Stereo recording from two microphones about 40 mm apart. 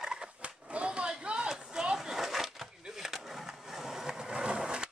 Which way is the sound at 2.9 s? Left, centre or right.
Centre.